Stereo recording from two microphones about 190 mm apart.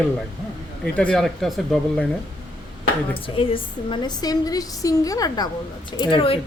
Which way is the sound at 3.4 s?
25° left (ahead or behind).